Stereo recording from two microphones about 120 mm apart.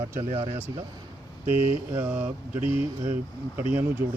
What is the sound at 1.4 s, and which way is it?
Speech, 55° left (ahead or behind).